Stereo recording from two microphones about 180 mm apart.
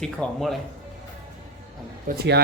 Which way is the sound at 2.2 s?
65° right (ahead or behind).